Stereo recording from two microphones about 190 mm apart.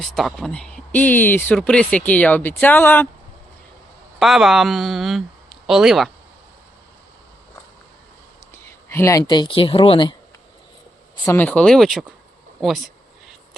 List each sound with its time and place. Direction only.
0.0 s speech: centre (ahead or behind)
4.2 s speech: centre (ahead or behind)
8.9 s speech: 15° left (ahead or behind)
11.3 s speech: 10° left (ahead or behind)